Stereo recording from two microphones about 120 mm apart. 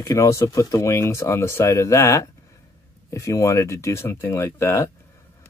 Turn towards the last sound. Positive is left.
turn(degrees=20)  # may be behind; listen again after turning